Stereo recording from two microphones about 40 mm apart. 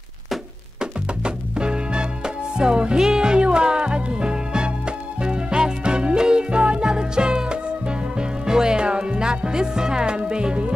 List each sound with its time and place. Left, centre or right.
0.7 s music: right